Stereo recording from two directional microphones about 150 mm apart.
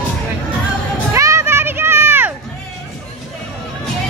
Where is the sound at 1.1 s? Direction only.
20° right (ahead or behind).